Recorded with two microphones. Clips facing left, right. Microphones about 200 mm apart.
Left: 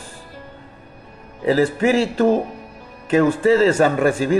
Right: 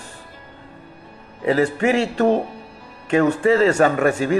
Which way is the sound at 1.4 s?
35° left (ahead or behind).